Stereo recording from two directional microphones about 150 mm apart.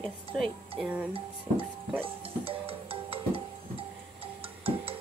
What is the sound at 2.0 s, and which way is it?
Music, 40° right (ahead or behind).